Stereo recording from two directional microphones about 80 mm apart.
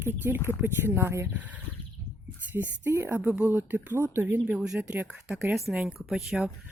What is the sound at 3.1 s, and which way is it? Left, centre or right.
Speech, centre.